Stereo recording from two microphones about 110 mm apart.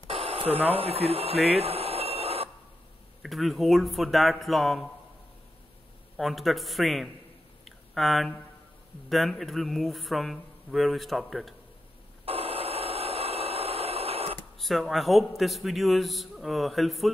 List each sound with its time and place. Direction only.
0.1 s a sound: 60° right (ahead or behind)
0.7 s speech: 60° right (ahead or behind)
3.2 s a man's voice: centre (ahead or behind)
6.1 s a man's voice: centre (ahead or behind)
7.6 s a sound: centre (ahead or behind)
9.1 s a man's voice: centre (ahead or behind)
12.3 s radio: 60° right (ahead or behind)
14.6 s a man's voice: centre (ahead or behind)